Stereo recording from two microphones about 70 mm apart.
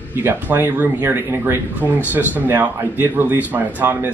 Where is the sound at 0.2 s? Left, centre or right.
Right.